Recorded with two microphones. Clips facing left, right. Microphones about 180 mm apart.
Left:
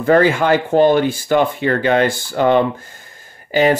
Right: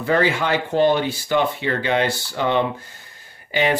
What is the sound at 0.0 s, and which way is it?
Speech, 50° left (ahead or behind).